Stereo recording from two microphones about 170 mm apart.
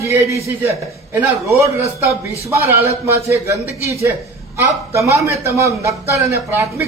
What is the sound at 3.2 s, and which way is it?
Speech, 15° right (ahead or behind).